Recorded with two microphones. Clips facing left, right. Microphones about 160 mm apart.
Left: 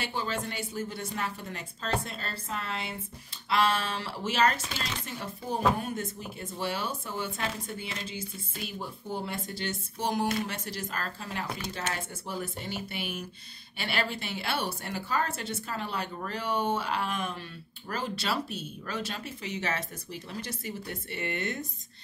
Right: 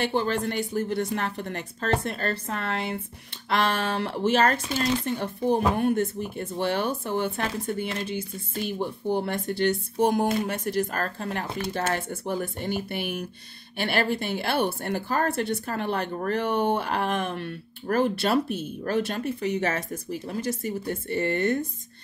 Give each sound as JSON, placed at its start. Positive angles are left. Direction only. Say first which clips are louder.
{"t": 0.0, "sound": "a woman's voice", "louder": "right 8 dB", "side_deg": -55}